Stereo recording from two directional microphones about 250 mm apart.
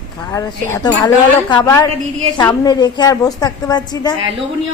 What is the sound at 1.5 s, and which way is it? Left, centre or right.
A woman's voice, centre.